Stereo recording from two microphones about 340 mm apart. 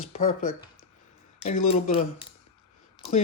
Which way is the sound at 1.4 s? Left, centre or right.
Left.